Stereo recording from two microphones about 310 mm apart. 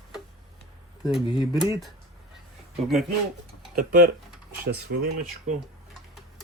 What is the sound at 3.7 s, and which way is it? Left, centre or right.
Speech, right.